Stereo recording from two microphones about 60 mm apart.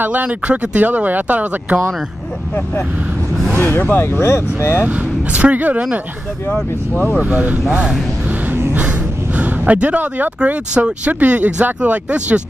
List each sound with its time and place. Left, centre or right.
0.0 s speech: right
3.5 s speech: left
4.8 s speech: right
6.4 s speech: left
7.2 s speech: right